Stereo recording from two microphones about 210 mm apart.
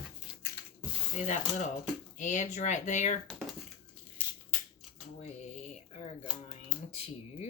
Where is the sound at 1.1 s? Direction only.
35° left (ahead or behind).